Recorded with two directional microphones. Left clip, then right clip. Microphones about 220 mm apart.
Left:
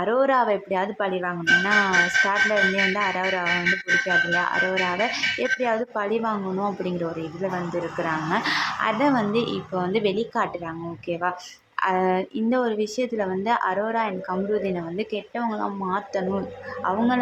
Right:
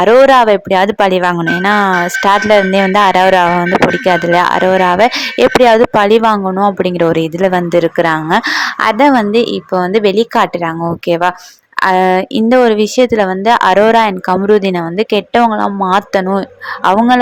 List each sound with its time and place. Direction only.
0.0 s speech: 45° right (ahead or behind)